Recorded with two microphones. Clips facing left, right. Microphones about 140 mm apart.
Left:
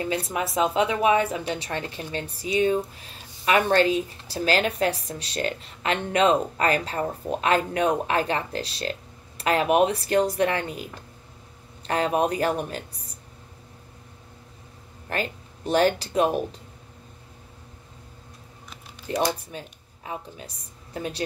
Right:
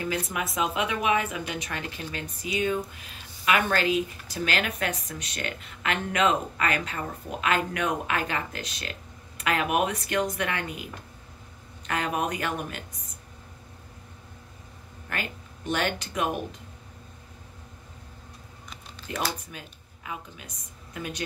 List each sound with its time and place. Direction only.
0.0 s a woman's voice: 30° left (ahead or behind)
15.0 s speech: 35° left (ahead or behind)
19.1 s a woman's voice: 30° left (ahead or behind)